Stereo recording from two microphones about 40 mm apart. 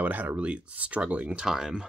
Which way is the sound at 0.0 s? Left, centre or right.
Right.